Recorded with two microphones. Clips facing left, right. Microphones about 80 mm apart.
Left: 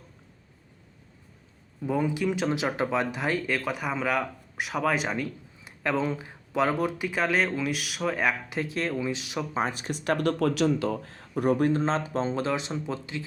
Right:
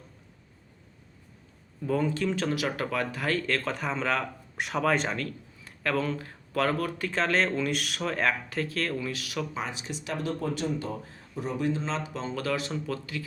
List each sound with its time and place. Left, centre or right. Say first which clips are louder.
1.8 s speech: left 1 dB; centre
9.6 s speech: left 6 dB; left